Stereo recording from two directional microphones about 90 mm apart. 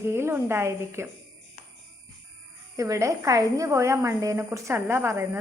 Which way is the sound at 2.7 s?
35° right (ahead or behind).